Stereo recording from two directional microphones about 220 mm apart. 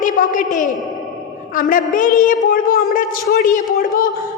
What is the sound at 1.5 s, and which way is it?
A woman's voice, 40° left (ahead or behind).